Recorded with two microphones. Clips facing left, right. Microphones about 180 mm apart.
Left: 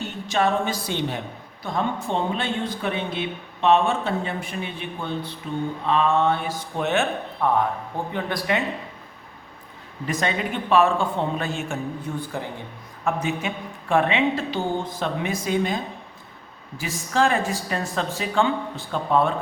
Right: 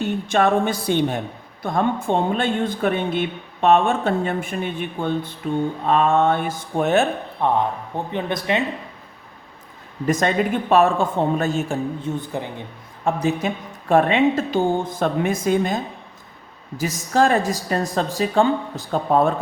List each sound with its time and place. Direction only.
0.0 s a sound: 55° right (ahead or behind)
1.6 s speech: 55° right (ahead or behind)
7.4 s speech: 25° right (ahead or behind)
10.1 s speech: 45° right (ahead or behind)
12.0 s speech: 20° right (ahead or behind)
13.1 s speech: 35° right (ahead or behind)